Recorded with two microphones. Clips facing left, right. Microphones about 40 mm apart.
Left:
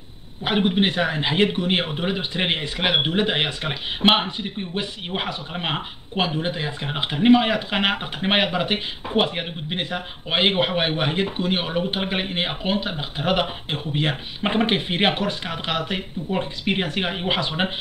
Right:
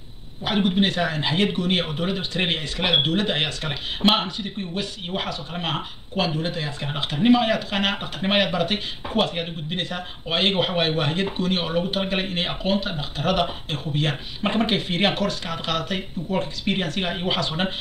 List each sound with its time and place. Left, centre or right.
0.6 s speech: left